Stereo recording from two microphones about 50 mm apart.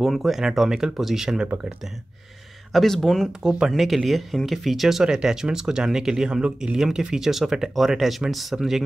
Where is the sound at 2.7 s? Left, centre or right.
Centre.